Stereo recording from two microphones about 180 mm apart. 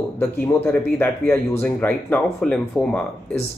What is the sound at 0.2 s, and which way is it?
Speech, 5° left (ahead or behind).